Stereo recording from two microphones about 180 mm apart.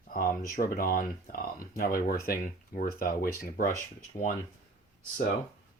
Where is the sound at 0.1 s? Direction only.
50° left (ahead or behind).